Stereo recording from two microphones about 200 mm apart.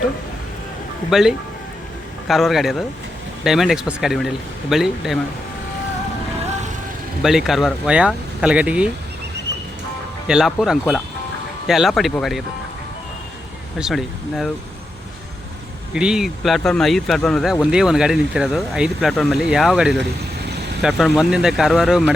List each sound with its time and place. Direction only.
1.1 s speech: centre (ahead or behind)
7.2 s speech: centre (ahead or behind)
10.2 s speech: 5° right (ahead or behind)
13.7 s speech: centre (ahead or behind)
16.0 s speech: 5° right (ahead or behind)
20.5 s vehicle: 55° right (ahead or behind)
20.8 s speech: 5° right (ahead or behind)